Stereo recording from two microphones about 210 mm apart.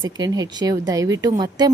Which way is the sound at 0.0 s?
20° right (ahead or behind).